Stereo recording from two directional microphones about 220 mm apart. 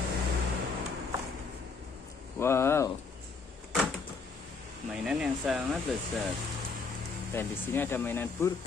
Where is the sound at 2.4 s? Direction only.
10° left (ahead or behind).